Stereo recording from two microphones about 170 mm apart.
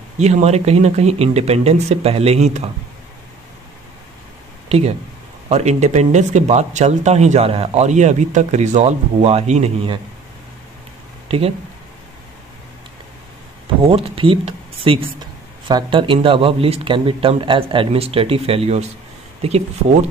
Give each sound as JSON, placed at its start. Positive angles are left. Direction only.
{"t": 0.2, "sound": "speech", "side_deg": -40}
{"t": 4.6, "sound": "speech", "side_deg": -40}
{"t": 11.2, "sound": "speech", "side_deg": -35}
{"t": 13.8, "sound": "speech", "side_deg": -35}